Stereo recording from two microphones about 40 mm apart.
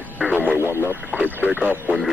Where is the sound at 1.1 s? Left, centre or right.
Right.